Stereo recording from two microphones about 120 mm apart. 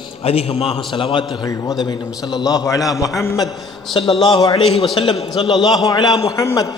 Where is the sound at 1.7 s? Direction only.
35° left (ahead or behind).